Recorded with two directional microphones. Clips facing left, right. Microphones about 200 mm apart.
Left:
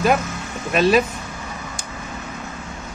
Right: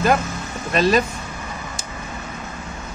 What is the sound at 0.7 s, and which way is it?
Speech, 5° left (ahead or behind).